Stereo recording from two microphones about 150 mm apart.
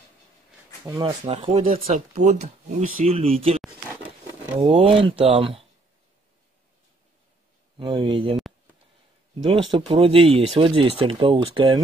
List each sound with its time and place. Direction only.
1.0 s speech: 35° right (ahead or behind)
7.7 s speech: 35° right (ahead or behind)
9.4 s speech: 35° right (ahead or behind)